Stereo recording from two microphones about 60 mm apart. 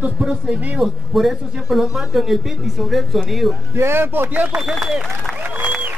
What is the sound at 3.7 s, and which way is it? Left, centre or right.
Speech, right.